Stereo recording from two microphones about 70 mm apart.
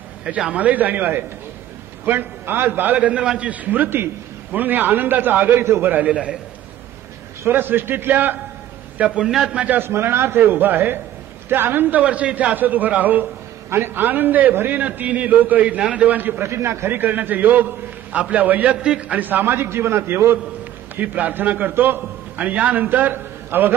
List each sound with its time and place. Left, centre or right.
0.5 s a man's voice: right
7.4 s a man's voice: right
8.9 s a man's voice: centre
9.7 s a man's voice: right
12.0 s a man's voice: centre
16.4 s a man's voice: right
20.9 s a man's voice: right